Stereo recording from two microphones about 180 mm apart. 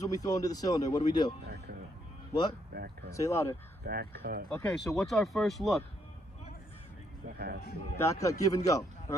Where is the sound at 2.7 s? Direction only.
60° right (ahead or behind).